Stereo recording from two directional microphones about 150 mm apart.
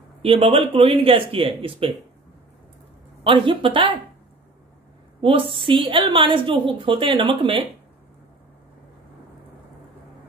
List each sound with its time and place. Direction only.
0.2 s a woman's voice: 40° right (ahead or behind)
3.3 s a woman's voice: 35° right (ahead or behind)
5.2 s a woman's voice: 35° right (ahead or behind)